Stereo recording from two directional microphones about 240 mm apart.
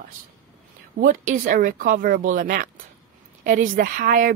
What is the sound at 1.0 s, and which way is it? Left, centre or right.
Speech, right.